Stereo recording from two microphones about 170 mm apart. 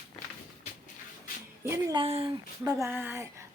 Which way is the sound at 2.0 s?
30° right (ahead or behind).